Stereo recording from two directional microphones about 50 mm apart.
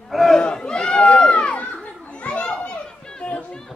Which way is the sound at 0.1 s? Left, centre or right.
Centre.